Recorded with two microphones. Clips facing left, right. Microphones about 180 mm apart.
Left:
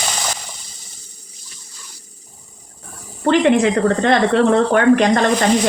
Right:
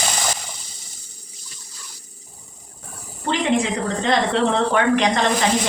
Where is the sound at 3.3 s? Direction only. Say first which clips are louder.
Left 7 dB; 60° left (ahead or behind).